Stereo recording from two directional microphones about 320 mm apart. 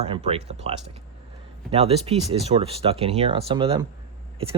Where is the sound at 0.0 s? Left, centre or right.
Centre.